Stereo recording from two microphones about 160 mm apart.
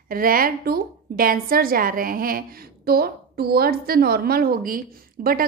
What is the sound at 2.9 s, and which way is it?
A woman's voice, 75° right (ahead or behind).